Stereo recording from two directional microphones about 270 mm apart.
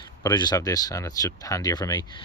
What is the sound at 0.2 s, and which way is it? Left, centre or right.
Speech, centre.